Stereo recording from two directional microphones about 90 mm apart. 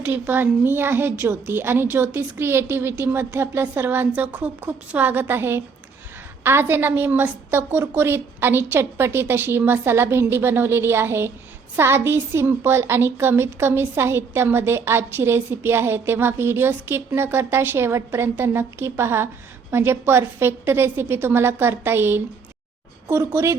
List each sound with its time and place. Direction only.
0.0 s a woman's voice: 20° right (ahead or behind)